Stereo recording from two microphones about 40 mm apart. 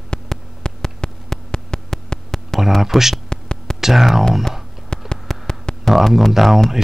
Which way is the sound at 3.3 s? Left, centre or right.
Centre.